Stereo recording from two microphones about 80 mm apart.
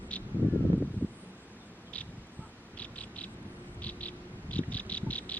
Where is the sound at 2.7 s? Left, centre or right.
Centre.